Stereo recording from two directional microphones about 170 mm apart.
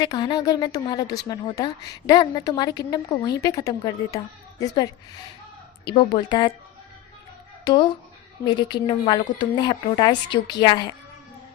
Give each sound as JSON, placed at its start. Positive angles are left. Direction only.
{"t": 0.0, "sound": "a woman's voice", "side_deg": 25}
{"t": 7.6, "sound": "a woman's voice", "side_deg": 25}